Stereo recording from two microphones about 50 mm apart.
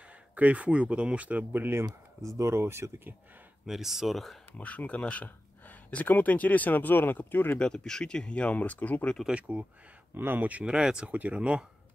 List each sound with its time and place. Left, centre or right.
0.4 s speech: right
2.2 s speech: right
3.6 s speech: centre
4.6 s speech: left
7.5 s speech: centre; by 9.0 s left
9.3 s speech: right
10.1 s speech: right
10.6 s speech: centre
11.1 s speech: right